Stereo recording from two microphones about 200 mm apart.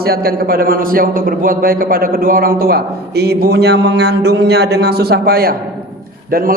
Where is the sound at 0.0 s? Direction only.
50° right (ahead or behind).